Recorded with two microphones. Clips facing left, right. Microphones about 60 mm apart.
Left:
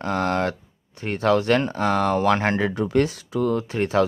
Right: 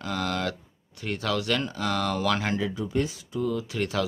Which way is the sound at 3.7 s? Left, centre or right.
Left.